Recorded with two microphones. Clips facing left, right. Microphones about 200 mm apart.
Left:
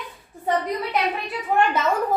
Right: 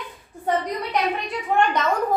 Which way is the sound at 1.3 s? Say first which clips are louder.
Even; 5° left (ahead or behind).